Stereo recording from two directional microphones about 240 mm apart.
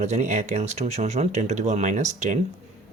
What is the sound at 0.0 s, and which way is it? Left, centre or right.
Speech, right.